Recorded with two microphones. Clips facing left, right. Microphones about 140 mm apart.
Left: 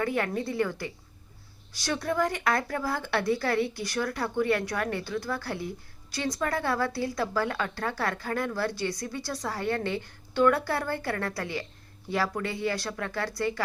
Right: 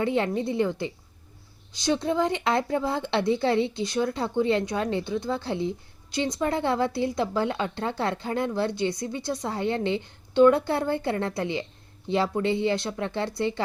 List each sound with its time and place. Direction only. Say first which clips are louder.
0.0 s speech: right 4 dB; 20° right (ahead or behind)